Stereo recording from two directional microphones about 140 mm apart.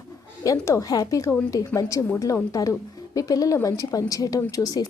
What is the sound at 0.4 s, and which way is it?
A woman's voice, 20° left (ahead or behind).